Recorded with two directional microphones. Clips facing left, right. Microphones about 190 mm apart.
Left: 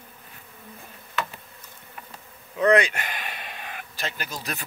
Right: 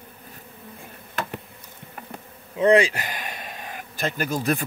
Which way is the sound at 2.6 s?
30° right (ahead or behind).